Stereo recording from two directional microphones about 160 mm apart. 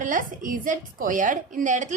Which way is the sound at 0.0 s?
55° right (ahead or behind).